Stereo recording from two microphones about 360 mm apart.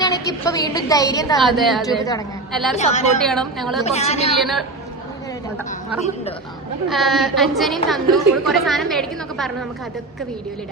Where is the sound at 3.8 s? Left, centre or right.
Centre.